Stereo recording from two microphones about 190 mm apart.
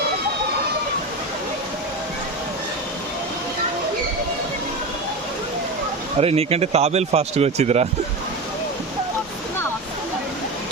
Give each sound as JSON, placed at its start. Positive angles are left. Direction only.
{"t": 6.1, "sound": "speech", "side_deg": -30}